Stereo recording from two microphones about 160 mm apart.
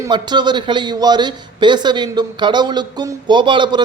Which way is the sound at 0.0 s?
25° right (ahead or behind).